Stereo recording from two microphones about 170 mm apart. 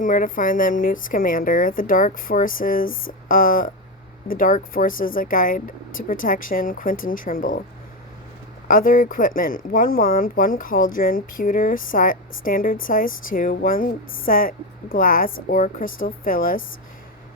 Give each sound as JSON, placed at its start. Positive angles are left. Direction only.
{"t": 0.0, "sound": "speech", "side_deg": 55}
{"t": 8.6, "sound": "speech", "side_deg": 55}